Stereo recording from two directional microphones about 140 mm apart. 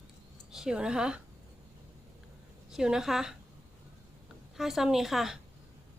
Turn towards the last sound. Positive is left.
turn(degrees=0)  # may be behind; listen again after turning